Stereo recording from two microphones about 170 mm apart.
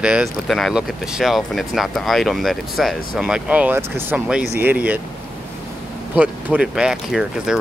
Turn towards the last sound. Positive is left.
turn(degrees=-5)  # may be behind; listen again after turning